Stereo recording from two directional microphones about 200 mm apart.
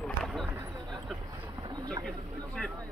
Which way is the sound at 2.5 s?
5° left (ahead or behind).